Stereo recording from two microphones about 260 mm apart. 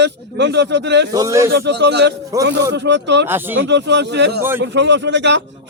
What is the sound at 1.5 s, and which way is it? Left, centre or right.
Speech, right.